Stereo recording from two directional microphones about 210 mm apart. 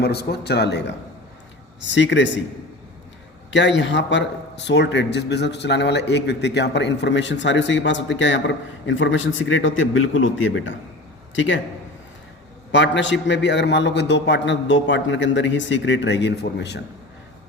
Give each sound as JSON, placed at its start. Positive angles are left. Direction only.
{"t": 0.0, "sound": "speech", "side_deg": 50}
{"t": 3.5, "sound": "speech", "side_deg": 60}
{"t": 12.7, "sound": "speech", "side_deg": 60}